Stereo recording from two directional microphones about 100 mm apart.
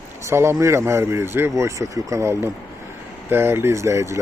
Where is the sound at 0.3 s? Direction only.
25° right (ahead or behind).